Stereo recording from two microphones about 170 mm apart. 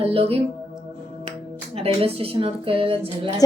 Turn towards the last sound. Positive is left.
turn(degrees=-30)  # may be behind; listen again after turning